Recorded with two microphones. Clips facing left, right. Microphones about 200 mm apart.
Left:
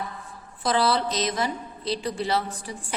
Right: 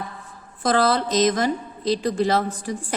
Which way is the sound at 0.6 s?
45° right (ahead or behind).